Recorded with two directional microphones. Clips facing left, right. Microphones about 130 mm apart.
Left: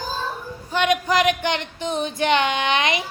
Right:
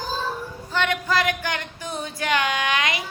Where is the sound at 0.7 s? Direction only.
15° left (ahead or behind).